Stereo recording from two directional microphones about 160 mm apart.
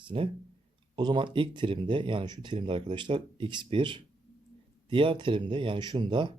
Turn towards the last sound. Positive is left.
turn(degrees=-30)  # may be behind; listen again after turning